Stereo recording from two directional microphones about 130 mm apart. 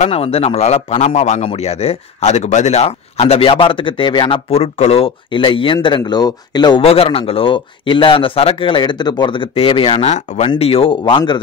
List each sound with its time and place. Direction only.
0.0 s speech: 50° left (ahead or behind); by 6.8 s 35° left (ahead or behind)
6.8 s speech: 45° left (ahead or behind)
10.6 s speech: 45° left (ahead or behind)